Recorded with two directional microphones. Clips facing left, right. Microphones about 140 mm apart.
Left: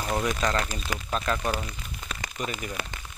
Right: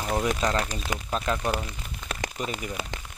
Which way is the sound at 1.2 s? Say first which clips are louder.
Even; 10° right (ahead or behind).